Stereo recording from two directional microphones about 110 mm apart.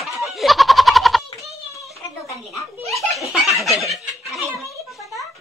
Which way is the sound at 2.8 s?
Centre (ahead or behind).